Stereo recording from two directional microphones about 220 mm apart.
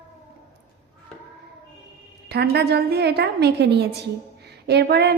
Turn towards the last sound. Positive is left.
turn(degrees=-45)  # may be behind; listen again after turning